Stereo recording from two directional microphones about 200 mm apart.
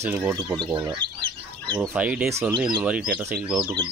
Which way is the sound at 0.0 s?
10° right (ahead or behind).